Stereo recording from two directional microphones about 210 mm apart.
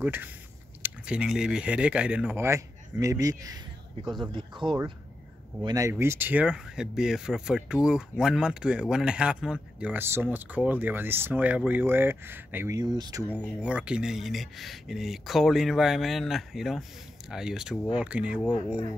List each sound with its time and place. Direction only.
0.0 s speech: 10° right (ahead or behind)
4.0 s speech: centre (ahead or behind)
4.3 s speech: 20° right (ahead or behind)
13.3 s speech: 5° right (ahead or behind)